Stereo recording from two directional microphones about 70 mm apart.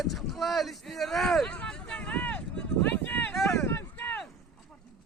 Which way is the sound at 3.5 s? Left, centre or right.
Left.